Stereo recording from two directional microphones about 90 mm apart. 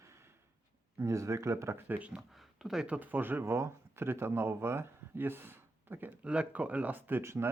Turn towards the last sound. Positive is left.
turn(degrees=-30)  # may be behind; listen again after turning